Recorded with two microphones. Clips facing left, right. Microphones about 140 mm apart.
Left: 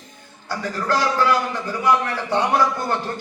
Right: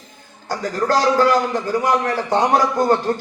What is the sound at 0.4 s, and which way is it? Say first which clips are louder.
A man's voice: right 4 dB; 45° right (ahead or behind).